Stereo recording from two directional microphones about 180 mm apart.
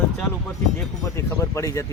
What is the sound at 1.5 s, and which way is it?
Speech, 15° left (ahead or behind).